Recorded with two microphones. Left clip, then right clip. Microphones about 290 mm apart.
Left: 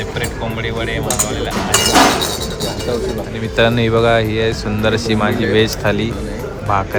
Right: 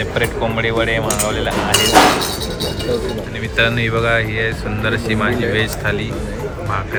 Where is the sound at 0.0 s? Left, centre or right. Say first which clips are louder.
Right 4 dB; centre.